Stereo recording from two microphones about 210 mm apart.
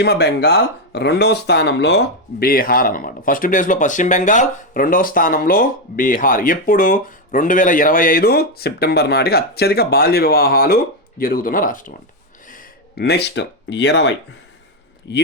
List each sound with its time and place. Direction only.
0.0 s speech: 50° left (ahead or behind)
2.4 s speech: 45° left (ahead or behind)